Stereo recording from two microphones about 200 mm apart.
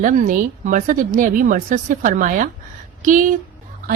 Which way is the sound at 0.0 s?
40° right (ahead or behind).